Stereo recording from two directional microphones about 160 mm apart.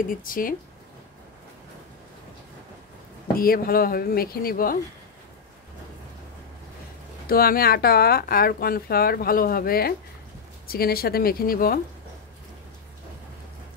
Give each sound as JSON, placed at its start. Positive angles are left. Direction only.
{"t": 0.1, "sound": "speech", "side_deg": 60}
{"t": 3.3, "sound": "speech", "side_deg": 65}
{"t": 7.2, "sound": "speech", "side_deg": 65}